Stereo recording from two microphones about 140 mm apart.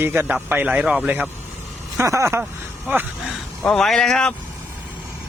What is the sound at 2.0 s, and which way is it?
Speech, 20° right (ahead or behind).